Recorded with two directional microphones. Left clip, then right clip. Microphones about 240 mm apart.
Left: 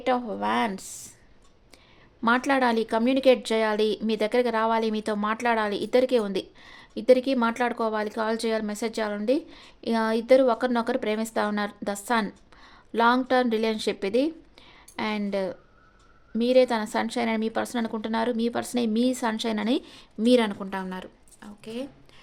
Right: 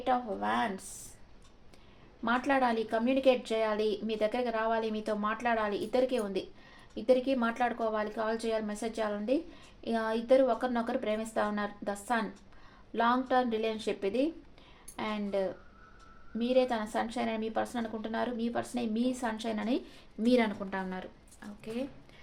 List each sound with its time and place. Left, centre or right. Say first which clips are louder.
0.0 s speech: left 5 dB; left
2.2 s speech: left 6 dB; left